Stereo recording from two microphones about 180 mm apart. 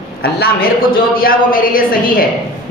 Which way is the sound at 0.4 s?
55° left (ahead or behind).